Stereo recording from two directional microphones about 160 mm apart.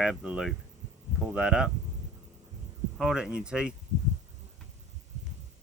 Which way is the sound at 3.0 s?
5° right (ahead or behind).